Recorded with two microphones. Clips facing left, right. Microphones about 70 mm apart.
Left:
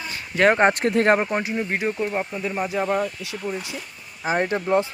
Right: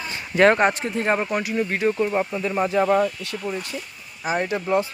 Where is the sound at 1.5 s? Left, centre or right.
Centre.